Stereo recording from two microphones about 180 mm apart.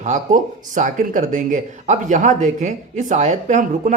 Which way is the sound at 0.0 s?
45° right (ahead or behind).